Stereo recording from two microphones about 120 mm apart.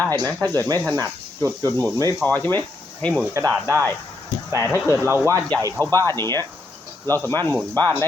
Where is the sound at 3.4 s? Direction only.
25° right (ahead or behind).